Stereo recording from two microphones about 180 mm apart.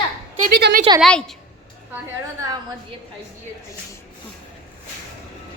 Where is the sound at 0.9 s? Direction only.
30° right (ahead or behind).